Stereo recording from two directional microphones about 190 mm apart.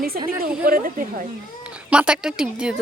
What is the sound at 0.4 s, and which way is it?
Speech, 50° right (ahead or behind).